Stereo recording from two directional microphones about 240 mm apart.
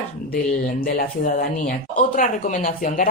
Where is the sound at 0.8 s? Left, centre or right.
Left.